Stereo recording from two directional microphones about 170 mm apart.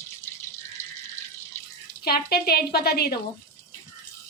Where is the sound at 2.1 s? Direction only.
65° left (ahead or behind).